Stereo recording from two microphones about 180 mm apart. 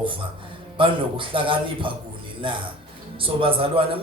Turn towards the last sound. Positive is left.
turn(degrees=-30)  # may be behind; listen again after turning